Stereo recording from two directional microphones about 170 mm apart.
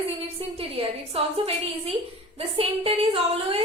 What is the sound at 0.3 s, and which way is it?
A woman's voice, 35° right (ahead or behind).